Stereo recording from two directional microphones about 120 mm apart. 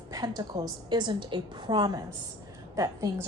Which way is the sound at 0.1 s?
35° right (ahead or behind).